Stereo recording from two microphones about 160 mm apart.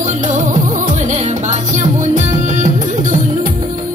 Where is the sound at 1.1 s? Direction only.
45° right (ahead or behind).